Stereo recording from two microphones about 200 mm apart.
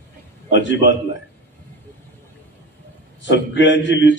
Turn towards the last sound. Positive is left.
turn(degrees=65)  # may be behind; listen again after turning